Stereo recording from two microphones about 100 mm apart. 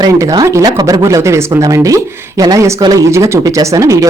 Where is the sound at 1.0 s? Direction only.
30° right (ahead or behind).